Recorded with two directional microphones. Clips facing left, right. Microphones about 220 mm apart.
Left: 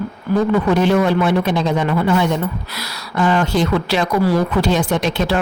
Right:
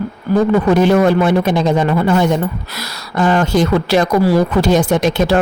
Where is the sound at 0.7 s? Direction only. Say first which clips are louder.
Right 4 dB; 45° right (ahead or behind).